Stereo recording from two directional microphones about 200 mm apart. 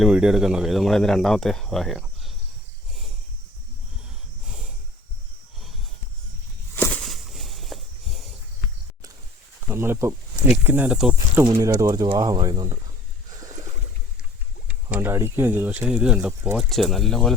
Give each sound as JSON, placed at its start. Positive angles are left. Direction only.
{"t": 0.0, "sound": "speech", "side_deg": -5}
{"t": 6.7, "sound": "a sound", "side_deg": 5}
{"t": 9.6, "sound": "speech", "side_deg": -10}
{"t": 11.4, "sound": "speech", "side_deg": -15}
{"t": 14.7, "sound": "speech", "side_deg": -5}